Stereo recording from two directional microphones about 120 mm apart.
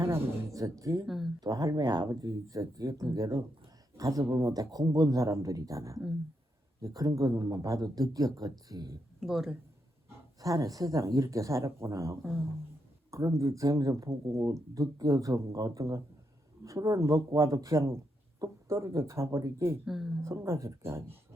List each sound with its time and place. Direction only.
0.0 s speech: 25° right (ahead or behind)
1.0 s speech: centre (ahead or behind)
1.4 s a man's voice: 30° right (ahead or behind)
9.2 s speech: centre (ahead or behind)
10.4 s a man's voice: 30° right (ahead or behind)
19.8 s speech: centre (ahead or behind)
20.2 s a man's voice: 20° right (ahead or behind)